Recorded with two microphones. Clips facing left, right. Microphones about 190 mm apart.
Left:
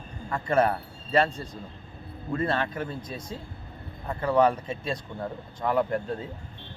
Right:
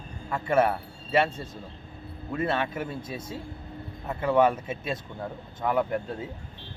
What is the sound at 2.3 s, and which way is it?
Speech, 5° right (ahead or behind).